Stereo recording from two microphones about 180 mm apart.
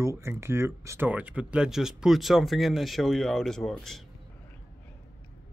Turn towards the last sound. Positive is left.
turn(degrees=0)  # may be behind; listen again after turning